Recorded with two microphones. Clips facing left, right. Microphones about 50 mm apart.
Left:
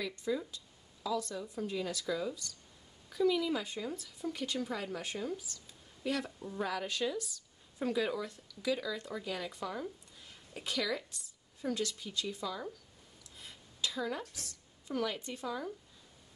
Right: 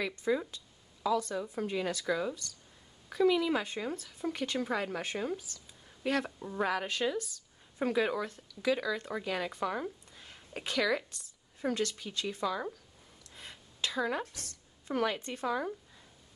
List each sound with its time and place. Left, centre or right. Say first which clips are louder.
0.0 s a woman's voice: right 4 dB; right
13.4 s a sound: right 2 dB; right
14.3 s speech: right 1 dB; right